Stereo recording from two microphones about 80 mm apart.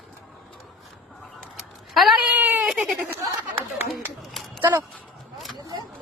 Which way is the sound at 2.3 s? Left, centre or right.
Right.